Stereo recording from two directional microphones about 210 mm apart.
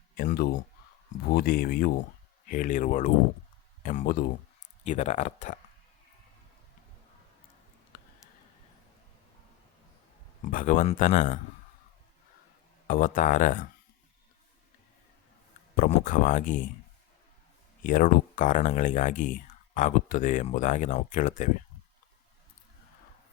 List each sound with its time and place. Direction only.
0.2 s speech: 45° left (ahead or behind)
4.8 s speech: 35° left (ahead or behind)
10.4 s speech: 40° left (ahead or behind)
12.9 s speech: 40° left (ahead or behind)
15.7 s speech: 40° left (ahead or behind)
17.8 s speech: 40° left (ahead or behind)